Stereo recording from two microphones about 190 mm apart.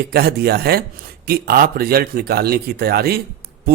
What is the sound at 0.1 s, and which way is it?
Speech, 55° right (ahead or behind).